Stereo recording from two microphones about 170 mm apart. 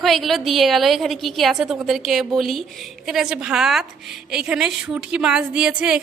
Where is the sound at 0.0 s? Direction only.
Centre (ahead or behind).